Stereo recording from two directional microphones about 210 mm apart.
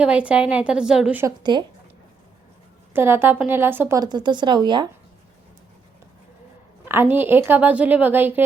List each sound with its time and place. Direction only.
0.0 s a woman's voice: 5° right (ahead or behind)
1.5 s speech: 20° right (ahead or behind)
2.9 s a woman's voice: 10° right (ahead or behind)
6.8 s a woman's voice: 10° right (ahead or behind)